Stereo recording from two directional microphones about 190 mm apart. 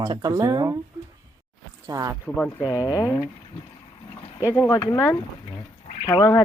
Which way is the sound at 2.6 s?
20° left (ahead or behind).